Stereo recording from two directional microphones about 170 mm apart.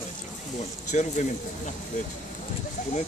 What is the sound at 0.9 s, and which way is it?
Speech, 45° left (ahead or behind).